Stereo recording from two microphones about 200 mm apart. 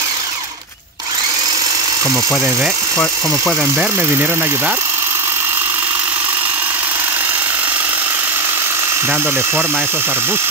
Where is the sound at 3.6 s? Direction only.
10° right (ahead or behind).